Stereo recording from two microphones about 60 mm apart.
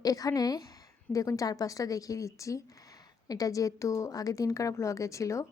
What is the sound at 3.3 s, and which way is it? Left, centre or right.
A woman's voice, left.